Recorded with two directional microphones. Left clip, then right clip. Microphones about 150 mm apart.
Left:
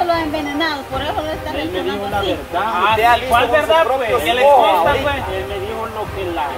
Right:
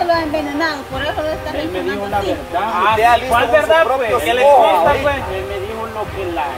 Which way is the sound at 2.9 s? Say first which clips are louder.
Right 1 dB; 5° left (ahead or behind).